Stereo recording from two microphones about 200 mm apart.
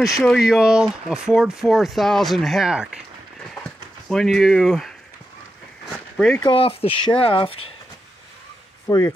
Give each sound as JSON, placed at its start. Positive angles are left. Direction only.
{"t": 0.1, "sound": "speech", "side_deg": 0}
{"t": 6.1, "sound": "speech", "side_deg": 0}
{"t": 6.4, "sound": "speech", "side_deg": 25}
{"t": 8.8, "sound": "speech", "side_deg": 15}